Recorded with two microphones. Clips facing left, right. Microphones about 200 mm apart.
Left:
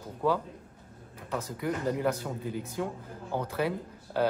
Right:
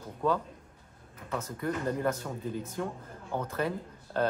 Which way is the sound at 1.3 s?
10° left (ahead or behind).